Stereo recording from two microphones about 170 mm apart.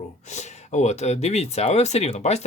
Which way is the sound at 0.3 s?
45° left (ahead or behind).